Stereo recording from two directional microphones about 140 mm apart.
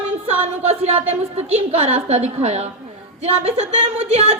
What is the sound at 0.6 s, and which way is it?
Speech, 45° right (ahead or behind).